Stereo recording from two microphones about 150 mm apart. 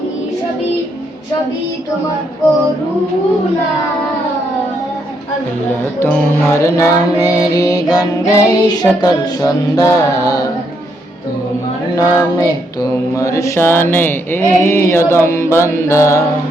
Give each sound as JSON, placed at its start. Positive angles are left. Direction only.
{"t": 6.0, "sound": "music", "side_deg": 15}
{"t": 11.9, "sound": "mantra", "side_deg": 20}